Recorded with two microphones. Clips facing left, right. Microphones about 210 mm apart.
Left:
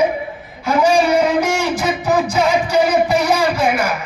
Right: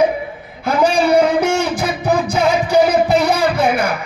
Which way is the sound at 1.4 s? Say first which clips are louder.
Right 1 dB; 60° right (ahead or behind).